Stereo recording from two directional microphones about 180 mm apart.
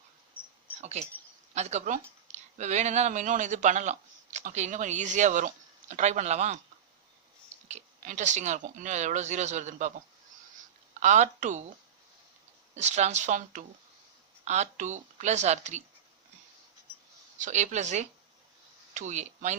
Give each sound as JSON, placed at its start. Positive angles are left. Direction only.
{"t": 0.8, "sound": "speech", "side_deg": -40}
{"t": 7.7, "sound": "speech", "side_deg": -40}
{"t": 11.0, "sound": "speech", "side_deg": -40}
{"t": 12.7, "sound": "speech", "side_deg": -40}
{"t": 17.3, "sound": "speech", "side_deg": -40}